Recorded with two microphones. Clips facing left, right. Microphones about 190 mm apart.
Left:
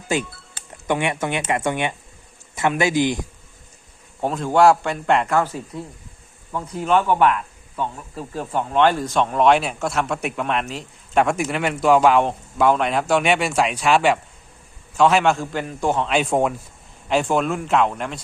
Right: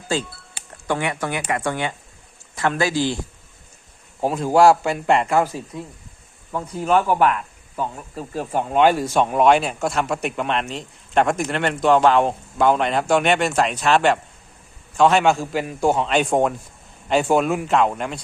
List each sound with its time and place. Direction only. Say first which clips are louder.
0.1 s speech: left 1 dB; 20° left (ahead or behind)
4.2 s speech: right 1 dB; 5° right (ahead or behind)
8.1 s speech: right 3 dB; 40° right (ahead or behind)
8.7 s speech: right 1 dB; 10° right (ahead or behind)